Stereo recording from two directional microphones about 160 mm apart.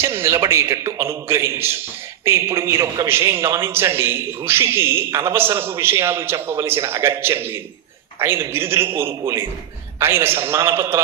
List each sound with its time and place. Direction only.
0.0 s a man's voice: 15° right (ahead or behind)